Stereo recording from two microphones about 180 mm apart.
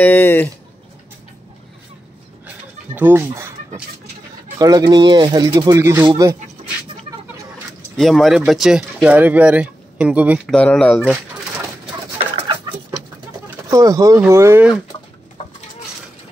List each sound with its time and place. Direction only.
0.0 s speech: 10° left (ahead or behind)
2.4 s goat: 10° right (ahead or behind)
4.6 s speech: 20° right (ahead or behind)
8.0 s speech: centre (ahead or behind)
10.4 s speech: 5° left (ahead or behind)
13.7 s speech: 20° right (ahead or behind)